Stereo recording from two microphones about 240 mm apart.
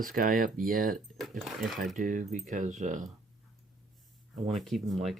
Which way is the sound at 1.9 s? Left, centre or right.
Right.